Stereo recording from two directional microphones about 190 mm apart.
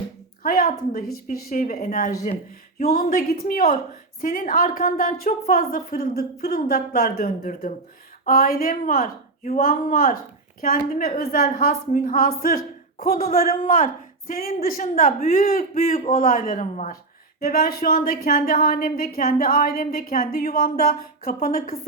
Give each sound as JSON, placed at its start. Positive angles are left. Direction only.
{"t": 0.4, "sound": "a woman's voice", "side_deg": 50}
{"t": 17.4, "sound": "a woman's voice", "side_deg": 50}